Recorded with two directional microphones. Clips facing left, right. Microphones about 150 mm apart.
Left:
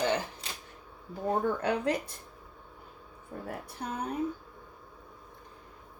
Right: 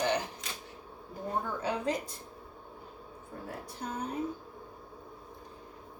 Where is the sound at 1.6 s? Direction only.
60° left (ahead or behind).